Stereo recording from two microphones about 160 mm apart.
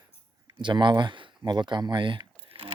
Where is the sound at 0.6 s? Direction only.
30° right (ahead or behind).